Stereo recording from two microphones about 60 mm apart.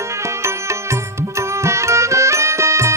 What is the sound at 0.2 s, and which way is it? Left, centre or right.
Music, right.